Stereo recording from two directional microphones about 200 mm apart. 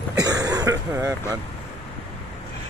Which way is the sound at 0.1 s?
15° right (ahead or behind).